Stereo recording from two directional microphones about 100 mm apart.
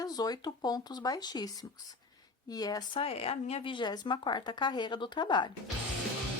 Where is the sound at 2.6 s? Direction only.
40° left (ahead or behind).